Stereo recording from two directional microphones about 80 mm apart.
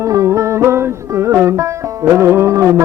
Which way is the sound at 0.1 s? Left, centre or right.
Right.